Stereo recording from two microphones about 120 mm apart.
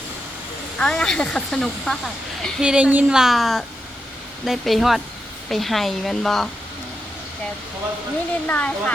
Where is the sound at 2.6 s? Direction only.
10° right (ahead or behind).